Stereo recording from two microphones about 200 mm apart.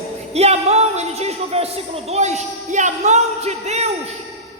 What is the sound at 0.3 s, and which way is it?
Speech, 30° right (ahead or behind).